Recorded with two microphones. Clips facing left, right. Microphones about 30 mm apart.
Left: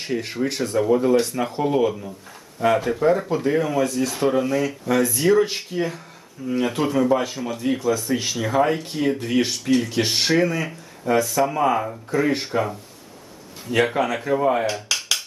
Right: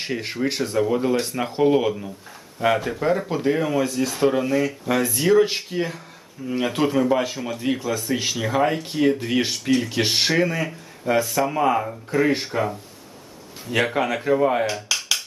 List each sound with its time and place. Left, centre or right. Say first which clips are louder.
0.0 s speech: even; right
1.2 s speech: right 2 dB; right
2.7 s speech: left 3 dB; centre
6.7 s speech: right 1 dB; centre
9.7 s speech: left 2 dB; centre
10.0 s speech: left 1 dB; centre